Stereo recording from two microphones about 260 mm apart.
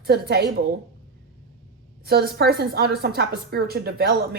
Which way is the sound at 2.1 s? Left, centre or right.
Right.